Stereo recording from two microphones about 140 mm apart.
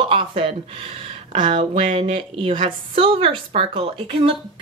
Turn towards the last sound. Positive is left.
turn(degrees=-40)  # may be behind; listen again after turning